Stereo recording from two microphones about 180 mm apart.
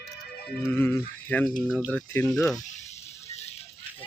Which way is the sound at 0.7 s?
10° left (ahead or behind).